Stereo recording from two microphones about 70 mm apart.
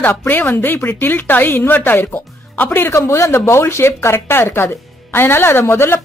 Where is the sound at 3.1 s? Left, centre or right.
Left.